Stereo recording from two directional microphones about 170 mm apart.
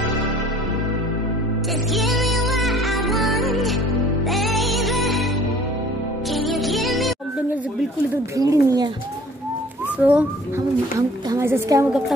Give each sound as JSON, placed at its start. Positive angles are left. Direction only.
{"t": 2.0, "sound": "music", "side_deg": 0}
{"t": 6.3, "sound": "music", "side_deg": 0}
{"t": 8.4, "sound": "a woman's voice", "side_deg": -20}
{"t": 10.0, "sound": "speech", "side_deg": -10}
{"t": 11.0, "sound": "a woman's voice", "side_deg": -20}